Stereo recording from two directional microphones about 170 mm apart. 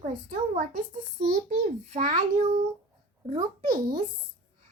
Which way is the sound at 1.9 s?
50° right (ahead or behind).